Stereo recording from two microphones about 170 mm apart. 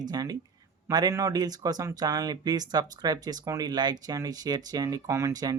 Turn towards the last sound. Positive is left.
turn(degrees=-20)  # may be behind; listen again after turning